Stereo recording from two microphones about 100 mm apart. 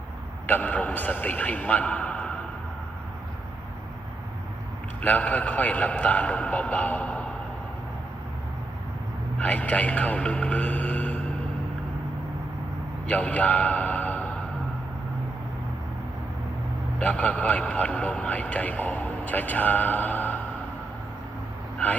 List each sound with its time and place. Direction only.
0.4 s a man's voice: 15° left (ahead or behind)
5.0 s a man's voice: 15° left (ahead or behind)
9.4 s a man's voice: 15° left (ahead or behind)
13.1 s a man's voice: 15° left (ahead or behind)
17.0 s speech: 15° left (ahead or behind)